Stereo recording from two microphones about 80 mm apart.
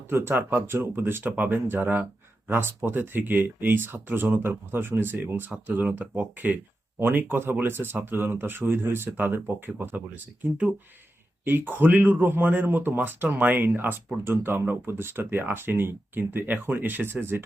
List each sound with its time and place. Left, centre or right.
0.1 s speech: right
11.4 s speech: right